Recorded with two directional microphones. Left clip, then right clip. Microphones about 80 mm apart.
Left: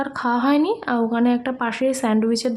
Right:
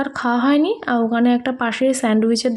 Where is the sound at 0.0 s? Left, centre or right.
Right.